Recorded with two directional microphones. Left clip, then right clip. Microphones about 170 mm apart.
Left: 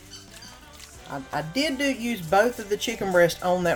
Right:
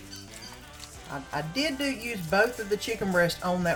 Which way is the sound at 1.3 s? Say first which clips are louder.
Left 3 dB; 50° left (ahead or behind).